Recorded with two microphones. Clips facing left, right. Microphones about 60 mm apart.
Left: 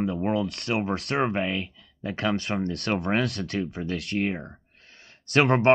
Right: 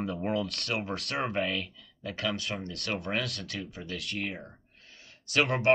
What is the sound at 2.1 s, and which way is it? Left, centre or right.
Speech, left.